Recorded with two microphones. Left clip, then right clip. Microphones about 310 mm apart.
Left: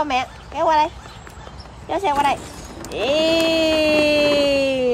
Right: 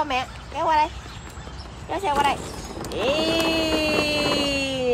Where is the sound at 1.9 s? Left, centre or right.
Left.